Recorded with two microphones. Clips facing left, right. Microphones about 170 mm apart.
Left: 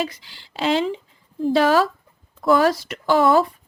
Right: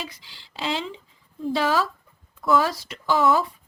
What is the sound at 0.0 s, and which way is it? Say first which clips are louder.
Speech: left 10 dB; 60° left (ahead or behind).